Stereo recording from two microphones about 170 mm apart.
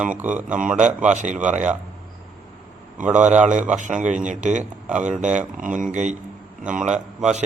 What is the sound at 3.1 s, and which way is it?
Speech, 45° right (ahead or behind).